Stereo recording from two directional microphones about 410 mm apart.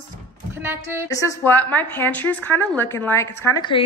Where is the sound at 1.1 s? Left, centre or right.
Centre.